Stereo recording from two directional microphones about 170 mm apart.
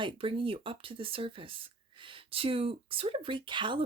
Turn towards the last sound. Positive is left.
turn(degrees=-30)  # may be behind; listen again after turning